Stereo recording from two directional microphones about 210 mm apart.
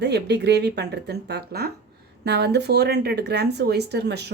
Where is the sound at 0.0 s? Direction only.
55° right (ahead or behind).